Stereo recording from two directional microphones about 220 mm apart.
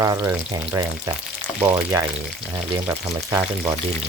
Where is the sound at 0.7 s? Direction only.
15° right (ahead or behind).